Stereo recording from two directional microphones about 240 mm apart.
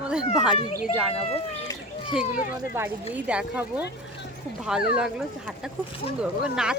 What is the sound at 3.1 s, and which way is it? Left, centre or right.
Speech, centre.